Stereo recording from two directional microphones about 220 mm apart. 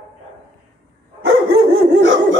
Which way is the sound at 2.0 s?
60° right (ahead or behind).